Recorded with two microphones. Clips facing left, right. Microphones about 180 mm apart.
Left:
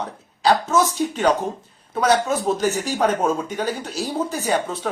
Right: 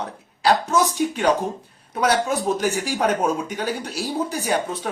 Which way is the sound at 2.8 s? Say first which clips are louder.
Left 1 dB; 15° right (ahead or behind).